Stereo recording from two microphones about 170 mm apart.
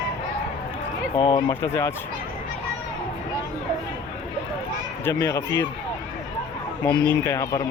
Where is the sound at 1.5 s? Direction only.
15° left (ahead or behind).